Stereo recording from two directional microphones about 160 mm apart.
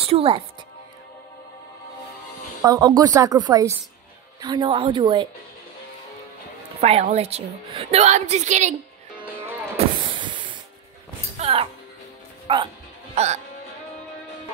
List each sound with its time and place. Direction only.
0.0 s speech: 35° right (ahead or behind)
2.6 s a woman's voice: 25° right (ahead or behind)
6.8 s a woman's voice: 45° right (ahead or behind)
9.1 s music: 10° right (ahead or behind)
9.8 s spray: 30° right (ahead or behind)
11.3 s music: 40° right (ahead or behind)
12.5 s speech: 30° right (ahead or behind)
13.1 s speech: 45° right (ahead or behind)